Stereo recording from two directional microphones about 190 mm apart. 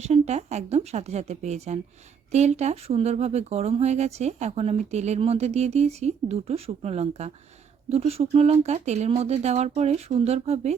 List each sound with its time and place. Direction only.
0.0 s speech: 35° right (ahead or behind)